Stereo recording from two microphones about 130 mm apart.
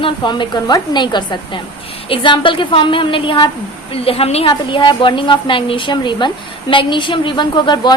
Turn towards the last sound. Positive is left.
turn(degrees=35)  # may be behind; listen again after turning